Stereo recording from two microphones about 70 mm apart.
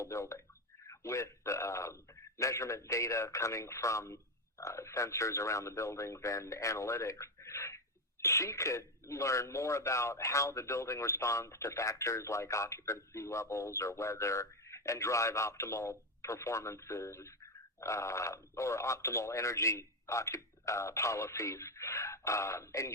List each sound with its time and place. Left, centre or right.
0.0 s speech: left